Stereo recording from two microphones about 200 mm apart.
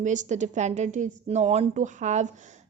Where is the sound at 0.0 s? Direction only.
35° right (ahead or behind).